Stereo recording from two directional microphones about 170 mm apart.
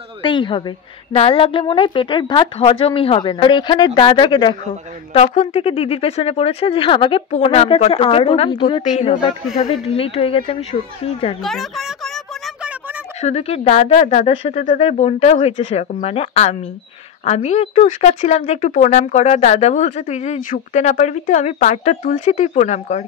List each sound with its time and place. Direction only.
0.2 s a woman's voice: 30° left (ahead or behind)
5.1 s speech: 40° left (ahead or behind)
11.4 s speech: centre (ahead or behind)
13.2 s speech: 35° left (ahead or behind)